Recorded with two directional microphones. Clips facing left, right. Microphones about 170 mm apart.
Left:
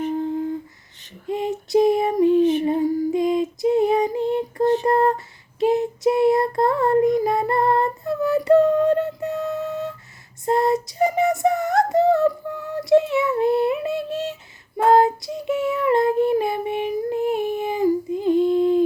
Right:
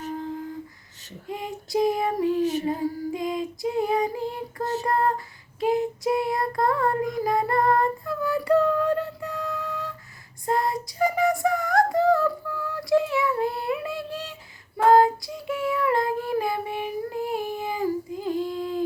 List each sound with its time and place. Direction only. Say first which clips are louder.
1.3 s female singing: left 8 dB; 25° left (ahead or behind)
5.5 s child singing: left 4 dB; 25° left (ahead or behind)
10.4 s female singing: left 6 dB; 25° left (ahead or behind)
14.8 s child singing: left 1 dB; 25° left (ahead or behind)